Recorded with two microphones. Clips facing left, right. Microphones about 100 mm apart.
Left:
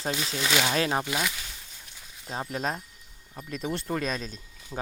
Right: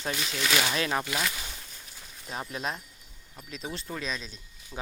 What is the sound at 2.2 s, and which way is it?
Speech, 30° left (ahead or behind).